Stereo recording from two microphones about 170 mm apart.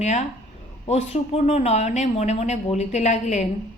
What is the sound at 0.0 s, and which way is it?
A woman's voice, 45° left (ahead or behind).